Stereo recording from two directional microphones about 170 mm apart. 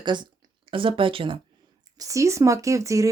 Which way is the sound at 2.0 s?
20° right (ahead or behind).